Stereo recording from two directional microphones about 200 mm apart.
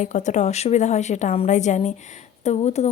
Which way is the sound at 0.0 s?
35° left (ahead or behind).